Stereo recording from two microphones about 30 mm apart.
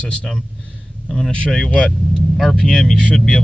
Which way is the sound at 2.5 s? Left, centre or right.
Left.